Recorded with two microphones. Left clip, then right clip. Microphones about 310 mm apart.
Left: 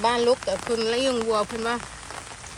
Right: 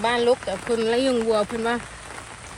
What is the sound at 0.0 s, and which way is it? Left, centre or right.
Speech, centre.